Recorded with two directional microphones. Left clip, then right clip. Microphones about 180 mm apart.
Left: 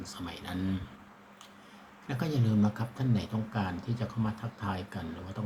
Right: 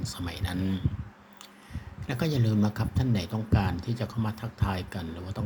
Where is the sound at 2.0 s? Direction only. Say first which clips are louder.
Right 4 dB; 40° right (ahead or behind).